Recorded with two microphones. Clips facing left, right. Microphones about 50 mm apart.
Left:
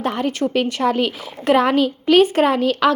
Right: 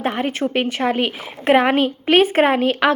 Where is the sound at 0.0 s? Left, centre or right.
Right.